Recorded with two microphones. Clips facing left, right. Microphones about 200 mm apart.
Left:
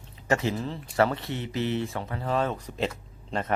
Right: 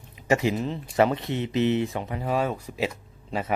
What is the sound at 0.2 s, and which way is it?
Speech, 15° right (ahead or behind).